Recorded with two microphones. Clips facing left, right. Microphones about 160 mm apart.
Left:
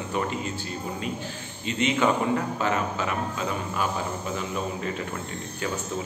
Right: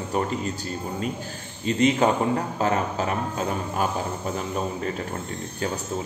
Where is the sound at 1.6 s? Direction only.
40° right (ahead or behind).